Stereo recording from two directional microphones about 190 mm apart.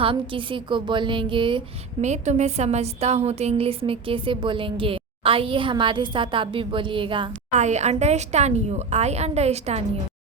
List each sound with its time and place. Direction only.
0.0 s speech: 30° right (ahead or behind)
7.5 s a woman's voice: 40° right (ahead or behind)